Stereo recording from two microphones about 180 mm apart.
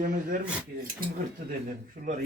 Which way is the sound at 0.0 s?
50° right (ahead or behind).